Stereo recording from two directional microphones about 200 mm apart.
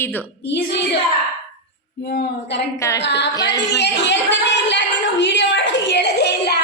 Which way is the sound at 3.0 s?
60° left (ahead or behind).